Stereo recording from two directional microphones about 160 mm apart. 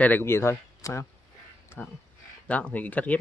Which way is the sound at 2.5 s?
10° left (ahead or behind).